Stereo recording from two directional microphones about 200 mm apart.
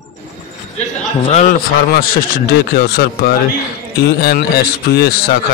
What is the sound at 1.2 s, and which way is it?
A man's voice, 35° left (ahead or behind).